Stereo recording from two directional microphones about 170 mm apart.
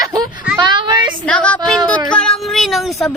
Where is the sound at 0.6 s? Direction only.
25° right (ahead or behind).